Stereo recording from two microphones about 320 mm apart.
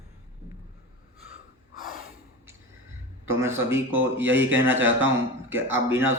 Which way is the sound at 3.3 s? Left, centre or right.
Centre.